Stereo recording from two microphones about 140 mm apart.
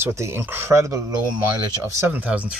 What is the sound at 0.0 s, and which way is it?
Speech, 15° right (ahead or behind).